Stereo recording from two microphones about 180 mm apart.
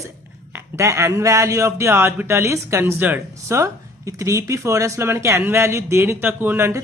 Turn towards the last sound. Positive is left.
turn(degrees=-10)  # may be behind; listen again after turning